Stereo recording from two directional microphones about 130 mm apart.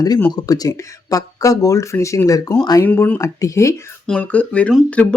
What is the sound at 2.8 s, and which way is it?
Speech, 15° left (ahead or behind).